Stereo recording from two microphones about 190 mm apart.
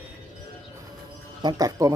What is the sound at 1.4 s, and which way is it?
Speech, 20° right (ahead or behind).